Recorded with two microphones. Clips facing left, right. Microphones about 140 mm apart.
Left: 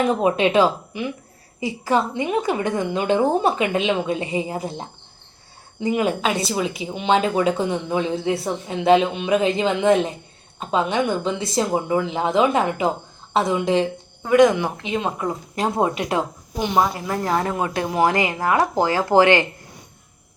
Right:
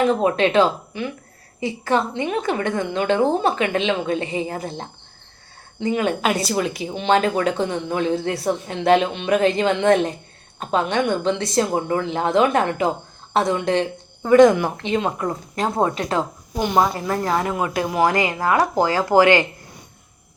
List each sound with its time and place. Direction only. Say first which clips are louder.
0.1 s a woman's voice: even; 10° left (ahead or behind)
6.2 s a woman's voice: right 1 dB; centre (ahead or behind)
16.6 s speech: right 1 dB; centre (ahead or behind)
16.9 s a woman's voice: right 2 dB; 10° left (ahead or behind)
17.6 s speech: even; 25° left (ahead or behind)